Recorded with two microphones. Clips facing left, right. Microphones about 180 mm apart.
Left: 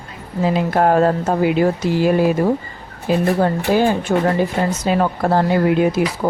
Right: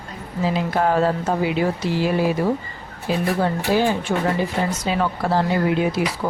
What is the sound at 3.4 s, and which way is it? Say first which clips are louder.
A woman's voice: left 4 dB; 50° left (ahead or behind).